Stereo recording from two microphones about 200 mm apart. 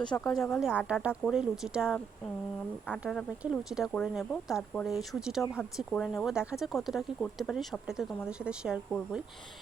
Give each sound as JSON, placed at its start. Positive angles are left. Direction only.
{"t": 0.0, "sound": "speech", "side_deg": 20}
{"t": 0.3, "sound": "speech", "side_deg": 0}